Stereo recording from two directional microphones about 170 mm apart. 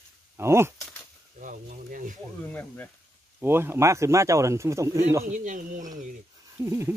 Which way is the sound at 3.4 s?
15° right (ahead or behind).